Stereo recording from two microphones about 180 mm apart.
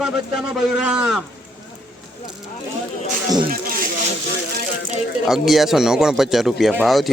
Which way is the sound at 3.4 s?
55° right (ahead or behind).